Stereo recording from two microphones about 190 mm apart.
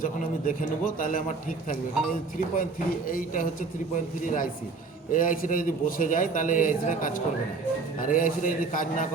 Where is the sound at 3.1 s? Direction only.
45° left (ahead or behind).